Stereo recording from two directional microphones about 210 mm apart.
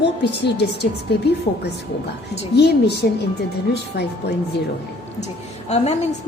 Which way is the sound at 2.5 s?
55° left (ahead or behind).